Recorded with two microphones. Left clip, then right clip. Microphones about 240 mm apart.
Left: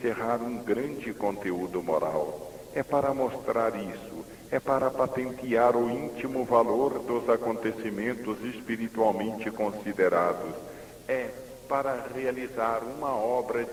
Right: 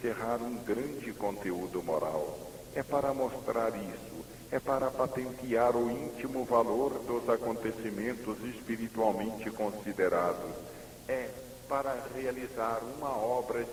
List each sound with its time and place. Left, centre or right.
0.0 s a man's voice: right